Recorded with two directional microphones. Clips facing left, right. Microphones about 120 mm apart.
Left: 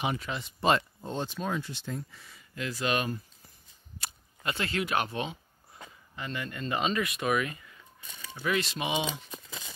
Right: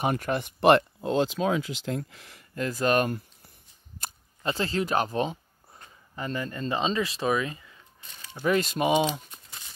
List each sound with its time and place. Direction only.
0.0 s speech: 55° right (ahead or behind); by 2.4 s 90° right
2.5 s speech: 45° right (ahead or behind)
4.4 s speech: 30° right (ahead or behind)
8.5 s speech: 45° right (ahead or behind)